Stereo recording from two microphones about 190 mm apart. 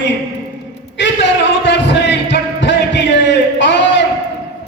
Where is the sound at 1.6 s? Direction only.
70° left (ahead or behind).